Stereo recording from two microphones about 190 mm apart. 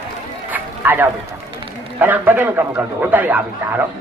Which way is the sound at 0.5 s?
10° right (ahead or behind).